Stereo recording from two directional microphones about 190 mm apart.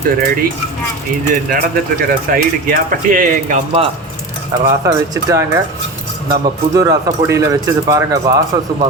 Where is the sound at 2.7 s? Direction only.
45° right (ahead or behind).